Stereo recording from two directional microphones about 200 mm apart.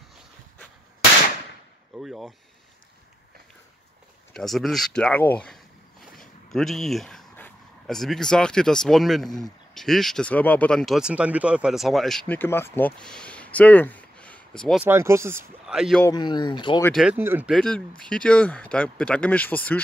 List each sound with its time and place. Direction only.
2.0 s speech: centre (ahead or behind)
4.3 s speech: centre (ahead or behind)
14.8 s speech: 10° right (ahead or behind)
16.0 s speech: 20° left (ahead or behind)
16.9 s speech: 5° right (ahead or behind)